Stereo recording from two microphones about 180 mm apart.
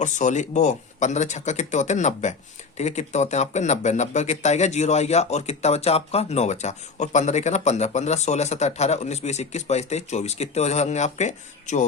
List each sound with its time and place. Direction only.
0.0 s speech: 40° left (ahead or behind)